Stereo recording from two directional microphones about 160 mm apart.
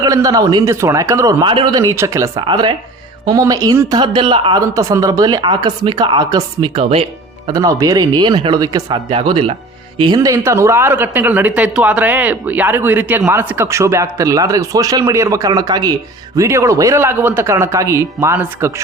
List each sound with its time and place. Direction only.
0.0 s speech: 20° right (ahead or behind)
4.6 s speech: 20° right (ahead or behind)
9.0 s speech: 30° right (ahead or behind); by 18.7 s 15° right (ahead or behind)